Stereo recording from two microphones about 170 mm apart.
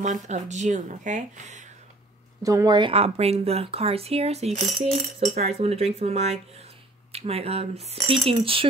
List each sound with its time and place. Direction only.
0.0 s speech: 45° right (ahead or behind)
2.4 s speech: 20° right (ahead or behind)